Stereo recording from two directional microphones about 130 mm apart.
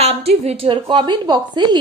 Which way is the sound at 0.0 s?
50° right (ahead or behind).